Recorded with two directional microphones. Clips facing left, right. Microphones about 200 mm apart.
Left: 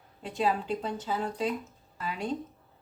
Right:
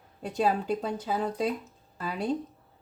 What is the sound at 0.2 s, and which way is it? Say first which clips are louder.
Speech: right 2 dB; 40° right (ahead or behind).